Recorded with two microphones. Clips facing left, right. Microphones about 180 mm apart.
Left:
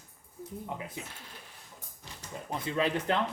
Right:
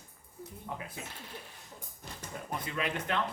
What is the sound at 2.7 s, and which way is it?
Speech, 30° left (ahead or behind).